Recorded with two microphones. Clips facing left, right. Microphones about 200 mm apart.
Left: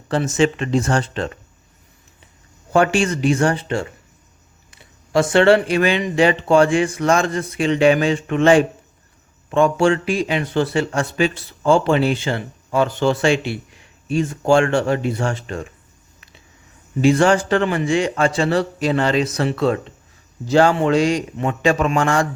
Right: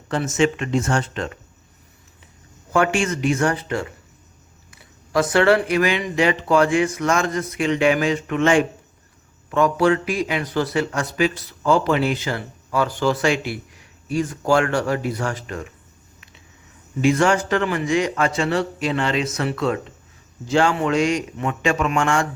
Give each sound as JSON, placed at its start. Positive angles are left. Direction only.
{"t": 0.1, "sound": "speech", "side_deg": 35}
{"t": 2.7, "sound": "speech", "side_deg": 30}
{"t": 17.0, "sound": "speech", "side_deg": 30}